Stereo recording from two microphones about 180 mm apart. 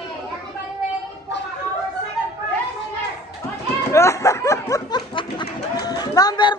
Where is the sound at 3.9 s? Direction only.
15° left (ahead or behind).